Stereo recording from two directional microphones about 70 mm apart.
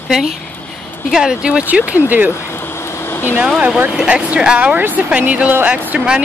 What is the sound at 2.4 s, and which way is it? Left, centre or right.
Vehicle, left.